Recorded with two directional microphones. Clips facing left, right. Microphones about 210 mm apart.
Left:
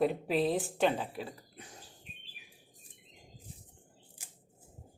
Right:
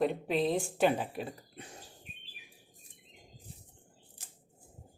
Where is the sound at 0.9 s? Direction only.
20° right (ahead or behind).